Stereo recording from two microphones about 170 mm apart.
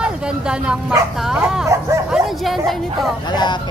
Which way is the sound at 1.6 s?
20° right (ahead or behind).